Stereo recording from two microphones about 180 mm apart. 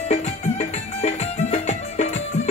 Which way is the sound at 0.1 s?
40° left (ahead or behind).